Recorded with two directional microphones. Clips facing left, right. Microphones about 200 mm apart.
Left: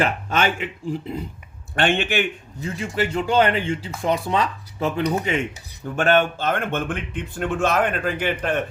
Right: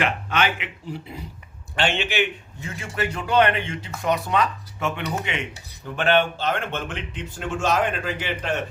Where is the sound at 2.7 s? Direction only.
30° left (ahead or behind).